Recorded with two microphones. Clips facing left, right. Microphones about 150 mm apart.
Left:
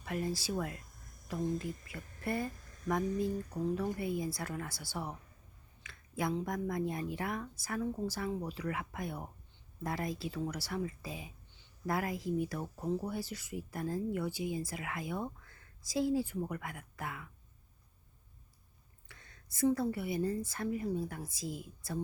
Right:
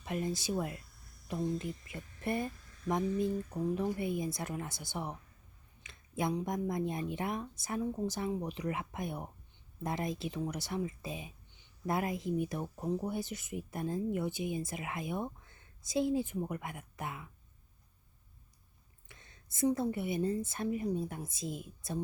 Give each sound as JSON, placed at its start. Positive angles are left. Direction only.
{"t": 0.0, "sound": "speech", "side_deg": -20}
{"t": 0.8, "sound": "a sound", "side_deg": 45}
{"t": 1.8, "sound": "speech", "side_deg": -20}
{"t": 19.0, "sound": "speech", "side_deg": -20}